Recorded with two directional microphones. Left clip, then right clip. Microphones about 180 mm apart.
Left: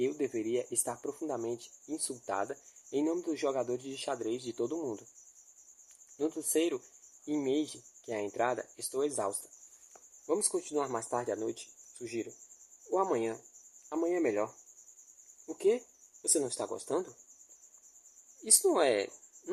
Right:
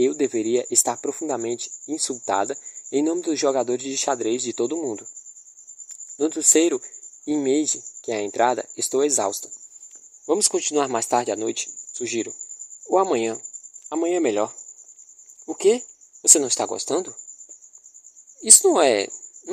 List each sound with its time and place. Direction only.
0.0 s a man's voice: 40° right (ahead or behind)
6.1 s a man's voice: 40° right (ahead or behind)
18.3 s a man's voice: 40° right (ahead or behind)